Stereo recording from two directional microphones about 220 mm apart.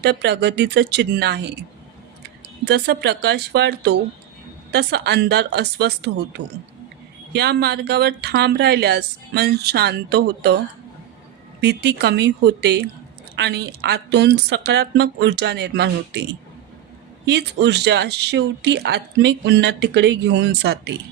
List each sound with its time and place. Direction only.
0.0 s speech: 50° right (ahead or behind)
2.6 s speech: 50° right (ahead or behind)
11.6 s speech: 50° right (ahead or behind)